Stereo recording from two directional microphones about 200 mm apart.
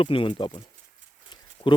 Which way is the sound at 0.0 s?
25° left (ahead or behind).